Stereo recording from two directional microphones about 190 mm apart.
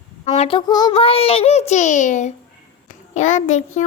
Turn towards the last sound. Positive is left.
turn(degrees=40)  # may be behind; listen again after turning